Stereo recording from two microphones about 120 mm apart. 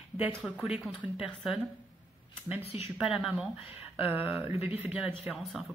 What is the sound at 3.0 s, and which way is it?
Speech, 5° right (ahead or behind).